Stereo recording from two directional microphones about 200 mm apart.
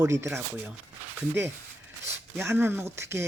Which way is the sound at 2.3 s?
15° right (ahead or behind).